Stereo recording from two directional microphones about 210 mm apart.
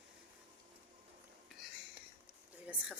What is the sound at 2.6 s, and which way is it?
Speech, 5° right (ahead or behind).